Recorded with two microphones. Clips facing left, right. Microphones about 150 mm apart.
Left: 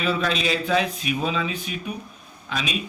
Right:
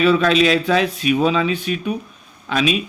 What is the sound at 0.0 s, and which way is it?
Speech, 90° right.